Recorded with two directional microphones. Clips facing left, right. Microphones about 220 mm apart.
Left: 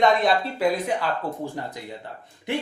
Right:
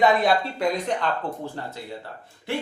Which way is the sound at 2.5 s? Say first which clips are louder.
Left 1 dB; 20° left (ahead or behind).